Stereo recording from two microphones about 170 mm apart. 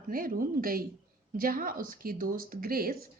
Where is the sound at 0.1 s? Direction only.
55° right (ahead or behind).